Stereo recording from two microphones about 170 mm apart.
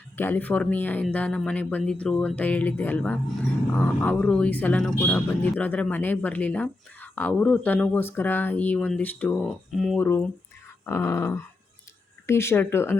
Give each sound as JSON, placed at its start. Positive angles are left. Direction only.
{"t": 0.2, "sound": "speech", "side_deg": 10}
{"t": 9.7, "sound": "speech", "side_deg": 0}
{"t": 10.0, "sound": "speech", "side_deg": 10}